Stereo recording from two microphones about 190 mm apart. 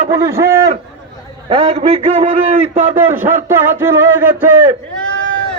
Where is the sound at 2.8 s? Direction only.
10° right (ahead or behind).